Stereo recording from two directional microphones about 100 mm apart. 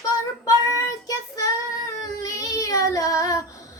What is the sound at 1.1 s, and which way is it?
Child singing, 35° left (ahead or behind).